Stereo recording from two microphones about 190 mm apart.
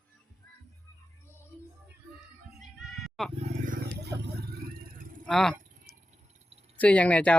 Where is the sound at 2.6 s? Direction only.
Centre (ahead or behind).